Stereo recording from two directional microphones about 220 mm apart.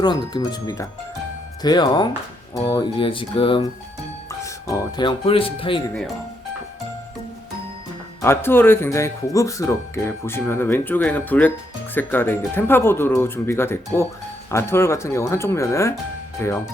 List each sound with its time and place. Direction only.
0.0 s music: 20° left (ahead or behind)
4.3 s speech: 15° left (ahead or behind)
8.2 s speech: 10° left (ahead or behind)